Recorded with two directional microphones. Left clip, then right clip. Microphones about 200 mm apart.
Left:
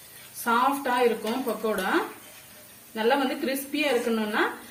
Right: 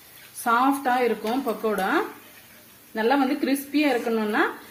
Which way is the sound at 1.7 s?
45° right (ahead or behind).